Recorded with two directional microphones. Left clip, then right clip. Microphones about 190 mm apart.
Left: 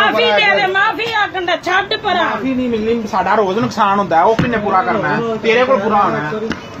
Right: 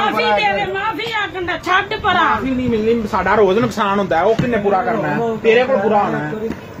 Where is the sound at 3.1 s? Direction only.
30° right (ahead or behind).